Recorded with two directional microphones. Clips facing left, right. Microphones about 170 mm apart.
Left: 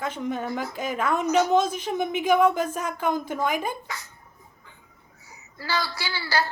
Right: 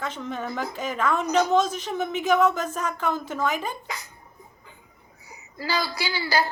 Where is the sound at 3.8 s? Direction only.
15° right (ahead or behind).